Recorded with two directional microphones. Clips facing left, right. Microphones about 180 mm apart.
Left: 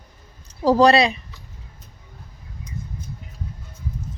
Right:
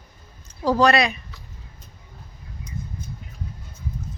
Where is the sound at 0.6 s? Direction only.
35° left (ahead or behind).